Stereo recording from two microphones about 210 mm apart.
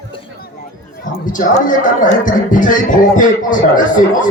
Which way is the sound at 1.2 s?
40° left (ahead or behind).